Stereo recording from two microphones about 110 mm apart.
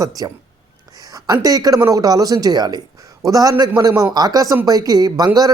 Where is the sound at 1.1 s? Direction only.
35° right (ahead or behind).